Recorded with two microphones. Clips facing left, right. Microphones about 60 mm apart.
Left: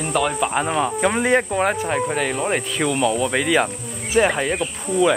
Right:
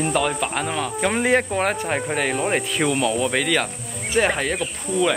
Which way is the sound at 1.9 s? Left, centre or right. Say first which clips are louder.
Left 1 dB; centre.